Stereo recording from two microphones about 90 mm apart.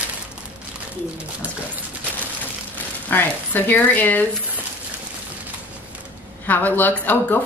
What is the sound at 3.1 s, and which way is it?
Speech, 20° left (ahead or behind).